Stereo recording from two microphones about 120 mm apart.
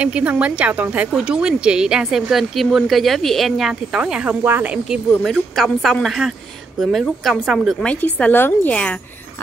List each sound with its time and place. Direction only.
0.0 s a woman's voice: 10° right (ahead or behind)
5.2 s a woman's voice: centre (ahead or behind)
7.8 s speech: 10° left (ahead or behind)